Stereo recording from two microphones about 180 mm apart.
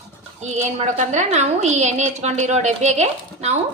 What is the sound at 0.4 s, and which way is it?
A woman's voice, 40° right (ahead or behind).